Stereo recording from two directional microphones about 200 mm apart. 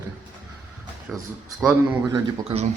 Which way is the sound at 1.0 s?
Centre (ahead or behind).